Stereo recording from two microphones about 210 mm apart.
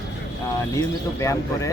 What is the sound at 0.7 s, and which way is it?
Speech, 15° left (ahead or behind).